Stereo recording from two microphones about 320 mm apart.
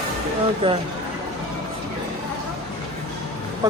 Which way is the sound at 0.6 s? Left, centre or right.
Centre.